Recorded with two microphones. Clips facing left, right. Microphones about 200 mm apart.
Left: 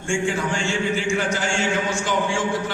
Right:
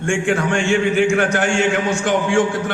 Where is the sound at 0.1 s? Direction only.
65° right (ahead or behind).